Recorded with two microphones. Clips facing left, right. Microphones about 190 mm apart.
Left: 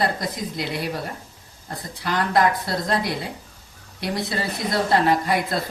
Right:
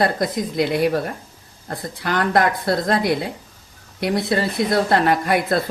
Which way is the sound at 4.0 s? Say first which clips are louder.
Right 6 dB; 60° right (ahead or behind).